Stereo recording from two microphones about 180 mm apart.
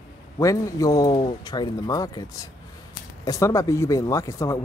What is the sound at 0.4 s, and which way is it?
Speech, 20° left (ahead or behind).